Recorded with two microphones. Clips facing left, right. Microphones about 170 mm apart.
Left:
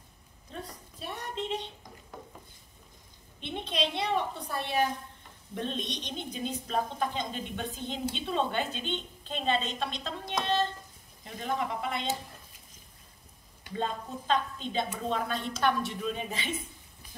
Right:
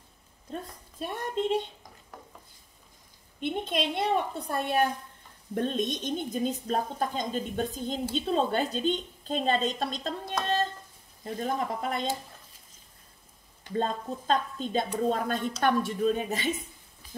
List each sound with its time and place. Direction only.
0.5 s a woman's voice: 45° right (ahead or behind)
3.3 s a woman's voice: 50° right (ahead or behind)
10.4 s a sound: 40° right (ahead or behind)
11.2 s a woman's voice: 40° right (ahead or behind)
13.7 s speech: 40° right (ahead or behind)